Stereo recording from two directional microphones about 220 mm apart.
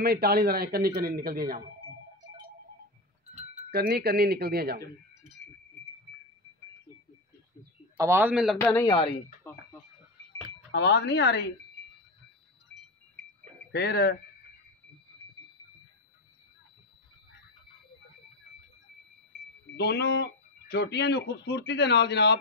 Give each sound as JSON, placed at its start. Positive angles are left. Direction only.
{"t": 0.0, "sound": "speech", "side_deg": -45}
{"t": 3.3, "sound": "speech", "side_deg": -35}
{"t": 8.0, "sound": "a man's voice", "side_deg": -10}
{"t": 8.5, "sound": "speech", "side_deg": 10}
{"t": 8.8, "sound": "speech", "side_deg": 20}
{"t": 9.5, "sound": "speech", "side_deg": 10}
{"t": 10.7, "sound": "speech", "side_deg": 50}
{"t": 13.7, "sound": "speech", "side_deg": 50}
{"t": 19.8, "sound": "speech", "side_deg": 50}